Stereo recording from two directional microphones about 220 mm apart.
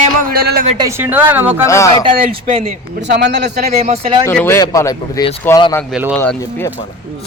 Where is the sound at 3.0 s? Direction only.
50° right (ahead or behind).